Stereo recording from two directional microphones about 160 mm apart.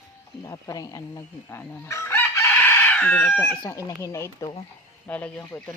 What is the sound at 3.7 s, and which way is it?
Speech, 20° left (ahead or behind).